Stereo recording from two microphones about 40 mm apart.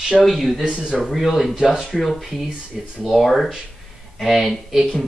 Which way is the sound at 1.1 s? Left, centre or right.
Centre.